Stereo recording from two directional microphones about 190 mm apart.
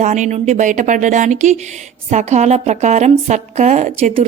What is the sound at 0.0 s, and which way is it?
A woman's voice, 40° right (ahead or behind).